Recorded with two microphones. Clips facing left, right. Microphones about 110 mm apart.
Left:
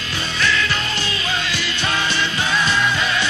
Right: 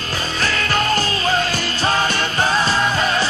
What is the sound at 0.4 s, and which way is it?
Music, 45° right (ahead or behind).